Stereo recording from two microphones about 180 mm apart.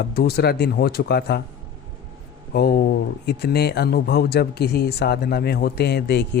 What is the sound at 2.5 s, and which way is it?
Speech, 60° left (ahead or behind).